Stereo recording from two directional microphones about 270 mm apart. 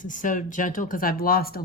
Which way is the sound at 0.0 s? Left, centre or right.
Left.